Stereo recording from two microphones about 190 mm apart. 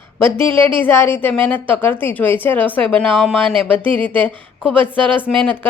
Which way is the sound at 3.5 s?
25° right (ahead or behind).